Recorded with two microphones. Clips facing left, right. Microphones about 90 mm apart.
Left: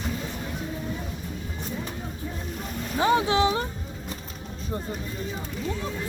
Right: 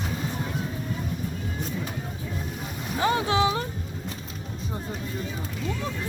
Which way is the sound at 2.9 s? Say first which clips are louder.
Left 2 dB; 20° left (ahead or behind).